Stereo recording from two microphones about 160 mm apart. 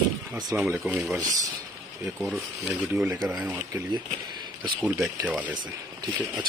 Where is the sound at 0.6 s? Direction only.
5° right (ahead or behind).